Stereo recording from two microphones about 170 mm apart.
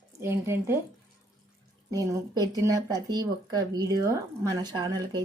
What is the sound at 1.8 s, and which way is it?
Speech, 20° right (ahead or behind).